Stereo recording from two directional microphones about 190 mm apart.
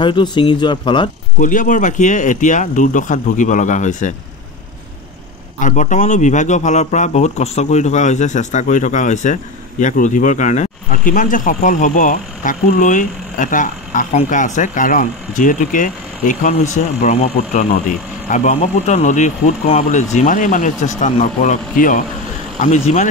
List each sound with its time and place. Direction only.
0.0 s speech: 25° left (ahead or behind)
1.4 s speech: 45° left (ahead or behind)
5.6 s speech: 40° left (ahead or behind)